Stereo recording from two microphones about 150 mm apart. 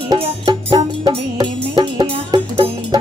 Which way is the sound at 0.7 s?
30° right (ahead or behind).